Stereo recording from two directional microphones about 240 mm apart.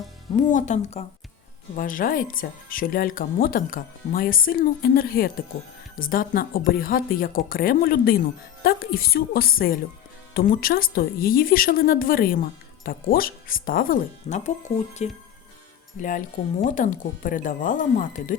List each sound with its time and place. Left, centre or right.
0.5 s a woman's voice: left